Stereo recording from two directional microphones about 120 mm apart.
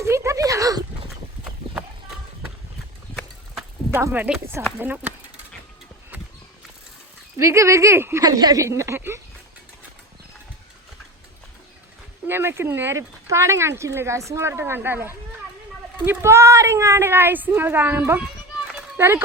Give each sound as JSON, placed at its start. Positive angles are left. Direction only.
{"t": 0.0, "sound": "a sound", "side_deg": -25}
{"t": 3.9, "sound": "speech", "side_deg": -15}
{"t": 7.3, "sound": "speech", "side_deg": -25}
{"t": 8.2, "sound": "speech", "side_deg": -35}
{"t": 12.3, "sound": "speech", "side_deg": -20}